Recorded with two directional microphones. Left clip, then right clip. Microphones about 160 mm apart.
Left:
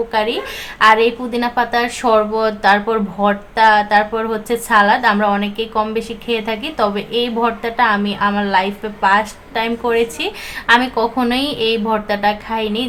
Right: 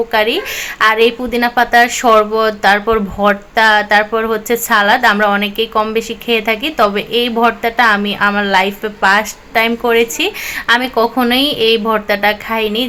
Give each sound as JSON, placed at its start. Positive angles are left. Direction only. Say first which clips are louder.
{"t": 0.1, "sound": "a woman's voice", "louder": "right 4 dB", "side_deg": -25}